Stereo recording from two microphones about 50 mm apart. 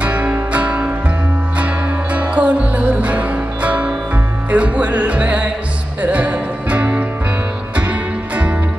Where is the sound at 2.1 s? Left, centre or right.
Right.